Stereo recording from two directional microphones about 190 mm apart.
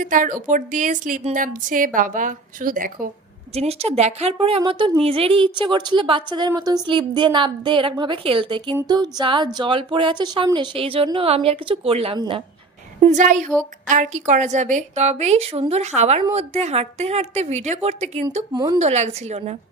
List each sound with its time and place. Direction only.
0.0 s a woman's voice: 45° right (ahead or behind)
3.5 s a woman's voice: 35° right (ahead or behind)
13.0 s a woman's voice: 40° right (ahead or behind)
18.5 s a woman's voice: 20° right (ahead or behind)
18.8 s a woman's voice: 35° right (ahead or behind)